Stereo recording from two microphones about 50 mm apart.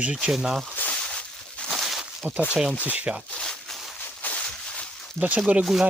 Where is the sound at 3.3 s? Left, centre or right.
Centre.